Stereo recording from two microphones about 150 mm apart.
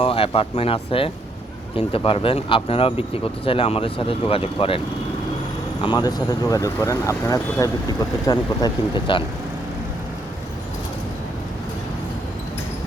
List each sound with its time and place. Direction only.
0.0 s speech: 40° left (ahead or behind)
5.8 s speech: 30° left (ahead or behind)